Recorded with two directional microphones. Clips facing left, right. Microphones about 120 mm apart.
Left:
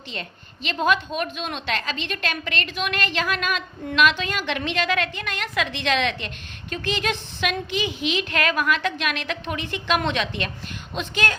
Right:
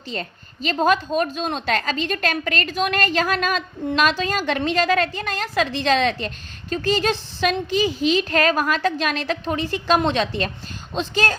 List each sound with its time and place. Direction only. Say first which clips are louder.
0.1 s a woman's voice: right 6 dB; 40° right (ahead or behind)